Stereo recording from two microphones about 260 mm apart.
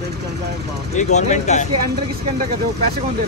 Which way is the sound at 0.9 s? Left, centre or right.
Left.